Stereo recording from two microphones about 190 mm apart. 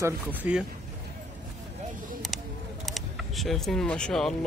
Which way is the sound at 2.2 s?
Centre (ahead or behind).